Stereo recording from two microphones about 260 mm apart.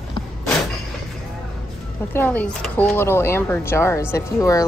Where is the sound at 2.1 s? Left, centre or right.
Centre.